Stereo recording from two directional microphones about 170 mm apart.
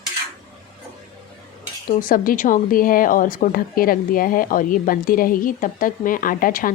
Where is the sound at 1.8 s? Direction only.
55° left (ahead or behind).